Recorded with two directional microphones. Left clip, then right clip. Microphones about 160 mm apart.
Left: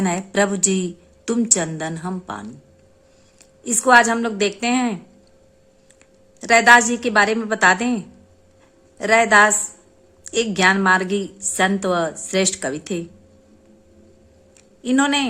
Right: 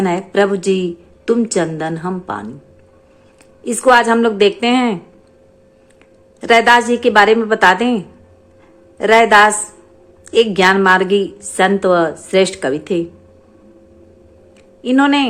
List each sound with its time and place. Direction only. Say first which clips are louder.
0.0 s a woman's voice: right 5 dB; 25° left (ahead or behind)
3.6 s a woman's voice: right 3 dB; 15° left (ahead or behind)
6.4 s a woman's voice: right 2 dB; 15° left (ahead or behind)
14.8 s a woman's voice: right 6 dB; 25° left (ahead or behind)